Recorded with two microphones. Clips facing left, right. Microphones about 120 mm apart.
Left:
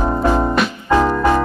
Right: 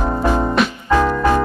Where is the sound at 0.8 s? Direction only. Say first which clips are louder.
Left 2 dB; 20° left (ahead or behind).